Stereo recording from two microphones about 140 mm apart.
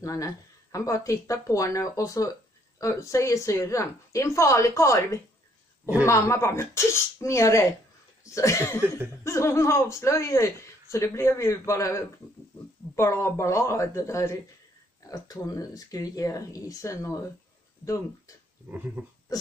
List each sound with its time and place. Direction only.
0.0 s speech: 25° left (ahead or behind)
8.8 s speech: 15° right (ahead or behind)
9.2 s speech: 20° left (ahead or behind)
19.0 s speech: 15° right (ahead or behind)